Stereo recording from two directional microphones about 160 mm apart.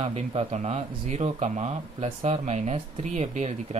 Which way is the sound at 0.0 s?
40° right (ahead or behind).